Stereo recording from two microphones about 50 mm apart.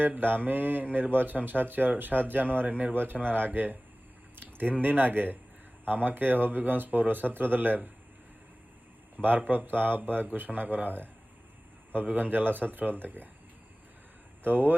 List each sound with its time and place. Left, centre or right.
0.0 s speech: right
4.4 s a sound: right
4.7 s speech: right
9.2 s speech: right
14.4 s speech: right